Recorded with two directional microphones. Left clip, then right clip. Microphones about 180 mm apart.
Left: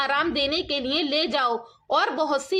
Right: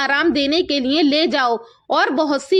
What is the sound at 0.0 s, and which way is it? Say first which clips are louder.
A woman's voice: right 6 dB; 40° right (ahead or behind).